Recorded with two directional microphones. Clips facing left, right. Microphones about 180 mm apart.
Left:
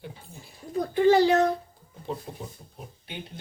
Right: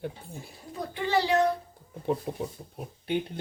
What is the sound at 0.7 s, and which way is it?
Speech, 45° left (ahead or behind).